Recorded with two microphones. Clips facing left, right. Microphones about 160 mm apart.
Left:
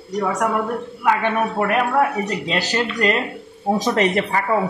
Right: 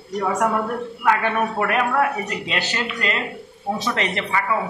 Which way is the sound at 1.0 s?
20° left (ahead or behind).